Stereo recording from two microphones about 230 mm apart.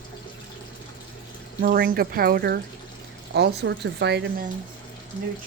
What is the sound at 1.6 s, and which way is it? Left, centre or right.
Speech, right.